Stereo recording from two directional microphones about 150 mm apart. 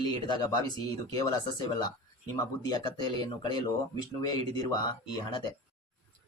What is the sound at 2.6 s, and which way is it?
Speech, 30° left (ahead or behind).